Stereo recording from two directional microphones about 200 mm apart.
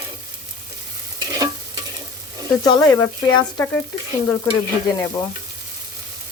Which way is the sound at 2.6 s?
20° left (ahead or behind).